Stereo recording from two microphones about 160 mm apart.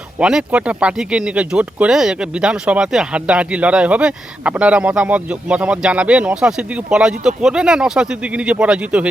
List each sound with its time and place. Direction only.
0.2 s speech: 5° right (ahead or behind)